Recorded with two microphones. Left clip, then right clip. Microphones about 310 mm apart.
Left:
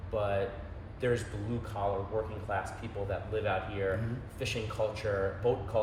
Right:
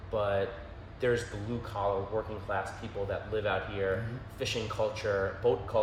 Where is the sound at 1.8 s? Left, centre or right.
Centre.